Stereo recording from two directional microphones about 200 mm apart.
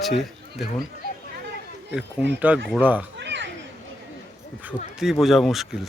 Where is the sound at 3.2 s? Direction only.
60° right (ahead or behind).